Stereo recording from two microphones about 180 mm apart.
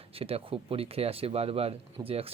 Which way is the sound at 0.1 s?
30° right (ahead or behind).